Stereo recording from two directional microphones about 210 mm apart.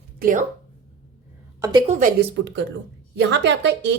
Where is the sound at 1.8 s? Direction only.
40° right (ahead or behind).